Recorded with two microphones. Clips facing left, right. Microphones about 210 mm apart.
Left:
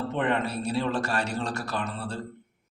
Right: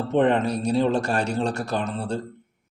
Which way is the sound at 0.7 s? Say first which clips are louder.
Right 6 dB; 35° right (ahead or behind).